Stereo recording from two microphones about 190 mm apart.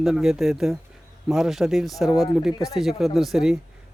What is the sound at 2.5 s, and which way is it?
Speech, 20° left (ahead or behind).